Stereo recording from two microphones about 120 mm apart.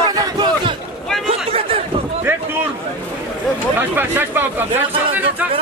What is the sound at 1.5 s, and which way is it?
Chatter, 55° right (ahead or behind).